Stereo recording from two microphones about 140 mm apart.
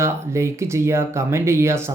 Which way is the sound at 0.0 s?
20° right (ahead or behind).